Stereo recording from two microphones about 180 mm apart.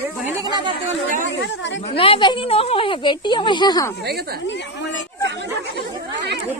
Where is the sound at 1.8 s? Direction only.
30° left (ahead or behind).